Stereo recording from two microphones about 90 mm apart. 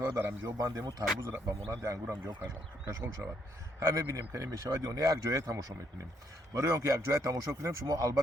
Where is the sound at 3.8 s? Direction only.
35° right (ahead or behind).